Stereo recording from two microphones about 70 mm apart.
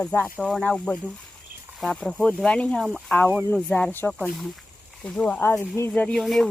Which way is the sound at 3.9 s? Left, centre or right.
Left.